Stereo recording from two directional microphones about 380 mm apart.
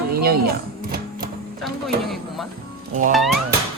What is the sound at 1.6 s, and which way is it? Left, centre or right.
Speech, centre.